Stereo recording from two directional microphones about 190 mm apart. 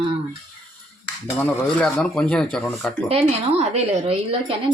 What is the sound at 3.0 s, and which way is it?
A woman's voice, 35° right (ahead or behind).